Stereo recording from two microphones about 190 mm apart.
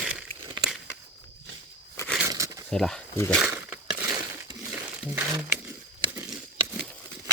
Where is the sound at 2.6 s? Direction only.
Centre (ahead or behind).